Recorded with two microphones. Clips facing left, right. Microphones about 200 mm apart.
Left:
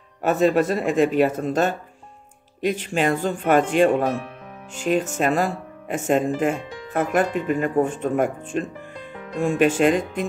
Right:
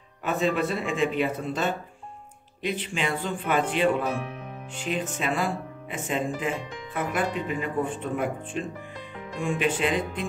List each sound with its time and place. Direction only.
0.2 s speech: 45° left (ahead or behind)